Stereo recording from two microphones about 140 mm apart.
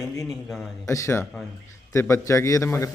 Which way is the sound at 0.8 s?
20° left (ahead or behind).